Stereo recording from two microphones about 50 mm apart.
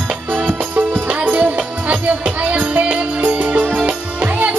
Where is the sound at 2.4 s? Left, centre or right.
Right.